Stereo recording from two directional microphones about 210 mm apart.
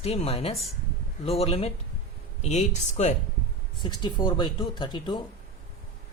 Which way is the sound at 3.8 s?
20° left (ahead or behind).